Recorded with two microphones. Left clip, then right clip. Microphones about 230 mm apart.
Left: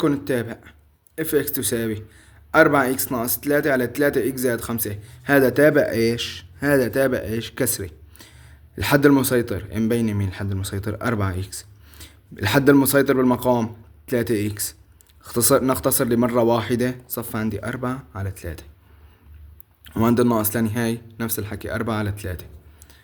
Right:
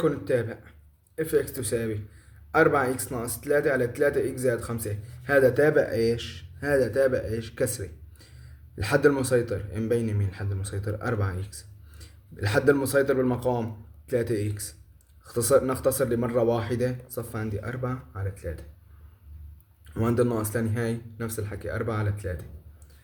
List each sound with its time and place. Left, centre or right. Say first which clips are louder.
0.0 s a man's voice: left 3 dB; left
19.8 s a man's voice: left 6 dB; left